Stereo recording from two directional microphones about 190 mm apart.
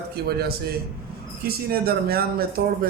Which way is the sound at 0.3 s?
55° right (ahead or behind).